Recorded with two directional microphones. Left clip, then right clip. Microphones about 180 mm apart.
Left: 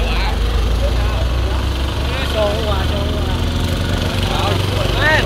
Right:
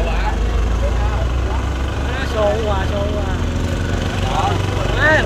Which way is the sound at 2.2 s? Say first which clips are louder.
Right 1 dB; centre (ahead or behind).